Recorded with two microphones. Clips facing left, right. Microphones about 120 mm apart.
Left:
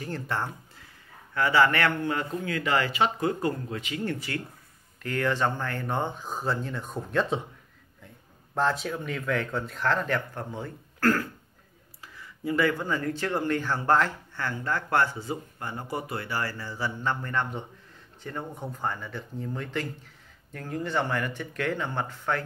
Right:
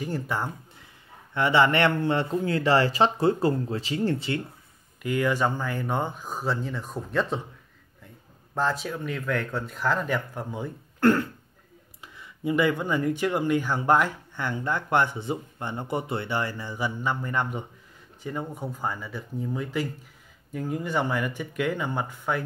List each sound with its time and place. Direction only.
0.0 s speech: 10° right (ahead or behind)
1.3 s a man's voice: 25° right (ahead or behind)
5.0 s speech: 10° right (ahead or behind)
8.5 s speech: centre (ahead or behind)
11.0 s cough: 25° right (ahead or behind)
12.0 s speech: 20° right (ahead or behind)